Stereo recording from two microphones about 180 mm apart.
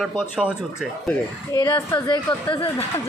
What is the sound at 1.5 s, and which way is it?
A woman's voice, 15° left (ahead or behind).